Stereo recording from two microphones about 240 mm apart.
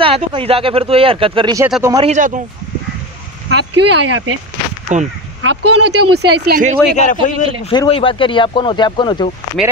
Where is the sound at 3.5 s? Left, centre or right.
Right.